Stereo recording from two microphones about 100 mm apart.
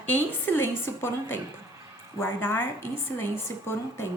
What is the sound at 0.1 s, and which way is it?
A woman's voice, 25° left (ahead or behind).